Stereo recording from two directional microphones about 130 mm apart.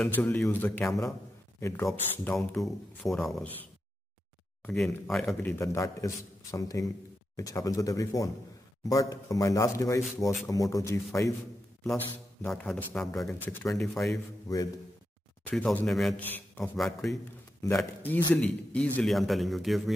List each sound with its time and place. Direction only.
0.0 s a man's voice: 15° left (ahead or behind)
2.3 s speech: centre (ahead or behind)
4.6 s speech: 5° left (ahead or behind)
5.3 s a man's voice: 20° left (ahead or behind)
11.8 s speech: 5° left (ahead or behind)
13.5 s a man's voice: 15° left (ahead or behind)
15.5 s speech: 5° left (ahead or behind)
16.2 s a man's voice: 15° left (ahead or behind)
16.7 s speech: centre (ahead or behind)
17.6 s a man's voice: 20° left (ahead or behind); by 19.8 s centre (ahead or behind)